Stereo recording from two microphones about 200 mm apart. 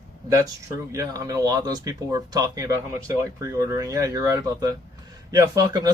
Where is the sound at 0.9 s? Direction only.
15° right (ahead or behind).